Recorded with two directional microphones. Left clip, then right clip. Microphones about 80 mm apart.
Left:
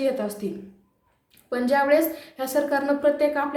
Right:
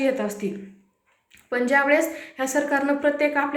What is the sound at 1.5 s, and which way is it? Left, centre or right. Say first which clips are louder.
A woman's voice: right 1 dB; left.